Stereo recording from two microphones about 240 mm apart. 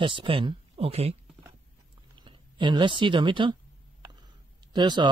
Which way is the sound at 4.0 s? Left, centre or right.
Centre.